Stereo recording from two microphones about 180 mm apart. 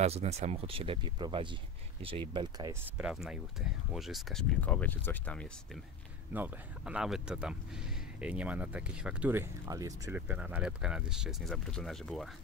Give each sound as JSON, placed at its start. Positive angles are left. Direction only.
{"t": 0.0, "sound": "speech", "side_deg": -35}
{"t": 3.0, "sound": "speech", "side_deg": -5}
{"t": 6.3, "sound": "speech", "side_deg": -10}
{"t": 10.2, "sound": "speech", "side_deg": -5}